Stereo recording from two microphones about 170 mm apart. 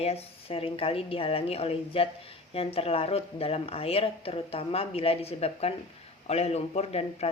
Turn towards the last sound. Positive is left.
turn(degrees=40)  # may be behind; listen again after turning